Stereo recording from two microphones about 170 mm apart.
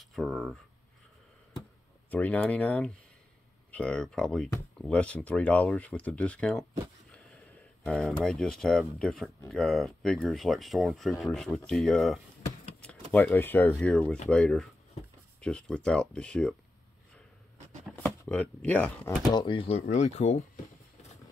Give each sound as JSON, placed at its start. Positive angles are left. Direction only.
{"t": 0.0, "sound": "speech", "side_deg": 0}
{"t": 2.0, "sound": "speech", "side_deg": 10}
{"t": 7.8, "sound": "speech", "side_deg": 5}
{"t": 18.0, "sound": "speech", "side_deg": 10}
{"t": 19.3, "sound": "speech", "side_deg": 30}